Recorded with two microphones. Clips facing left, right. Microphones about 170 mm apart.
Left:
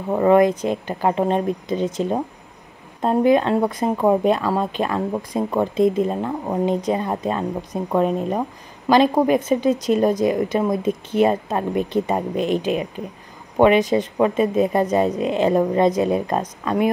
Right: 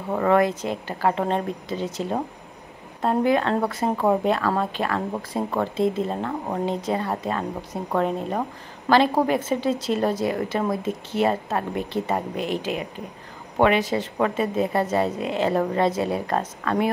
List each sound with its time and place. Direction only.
0.1 s speech: 20° left (ahead or behind)